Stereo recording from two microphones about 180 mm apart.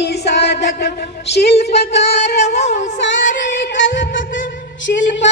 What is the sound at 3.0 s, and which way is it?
Music, 85° left.